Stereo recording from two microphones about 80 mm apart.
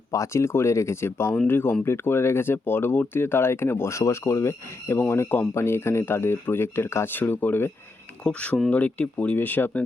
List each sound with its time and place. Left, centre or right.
0.1 s speech: left
8.2 s speech: centre